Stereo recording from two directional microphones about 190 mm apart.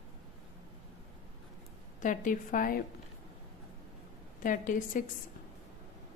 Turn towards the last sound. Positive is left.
turn(degrees=45)  # may be behind; listen again after turning